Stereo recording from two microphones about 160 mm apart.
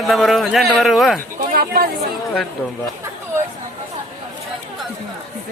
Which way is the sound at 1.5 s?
70° right (ahead or behind).